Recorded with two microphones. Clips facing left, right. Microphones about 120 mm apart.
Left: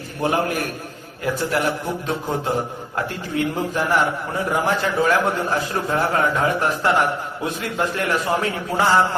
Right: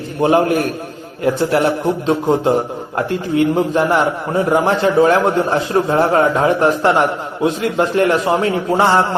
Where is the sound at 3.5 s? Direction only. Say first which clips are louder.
Right 6 dB; 25° right (ahead or behind).